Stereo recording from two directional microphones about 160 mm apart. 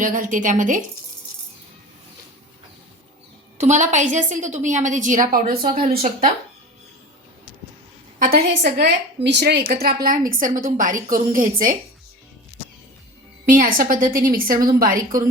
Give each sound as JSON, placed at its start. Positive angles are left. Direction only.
{"t": 0.0, "sound": "a woman's voice", "side_deg": -55}
{"t": 3.6, "sound": "a woman's voice", "side_deg": -50}
{"t": 8.2, "sound": "a woman's voice", "side_deg": -70}
{"t": 13.4, "sound": "a woman's voice", "side_deg": -55}